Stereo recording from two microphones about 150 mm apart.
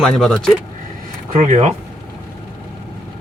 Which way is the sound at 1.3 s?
55° right (ahead or behind).